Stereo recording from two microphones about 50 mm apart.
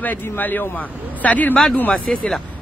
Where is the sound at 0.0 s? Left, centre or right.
Left.